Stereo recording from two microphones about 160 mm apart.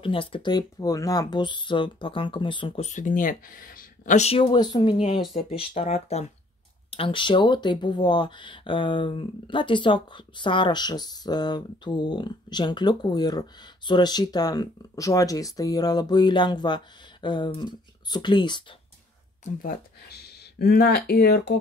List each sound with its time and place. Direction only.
0.0 s speech: 35° left (ahead or behind)
4.9 s speech: 40° left (ahead or behind)
19.6 s speech: 75° left (ahead or behind)